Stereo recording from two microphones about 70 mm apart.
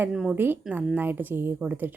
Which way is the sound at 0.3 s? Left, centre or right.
Right.